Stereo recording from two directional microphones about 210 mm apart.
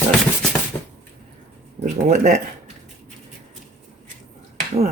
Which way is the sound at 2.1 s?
35° right (ahead or behind).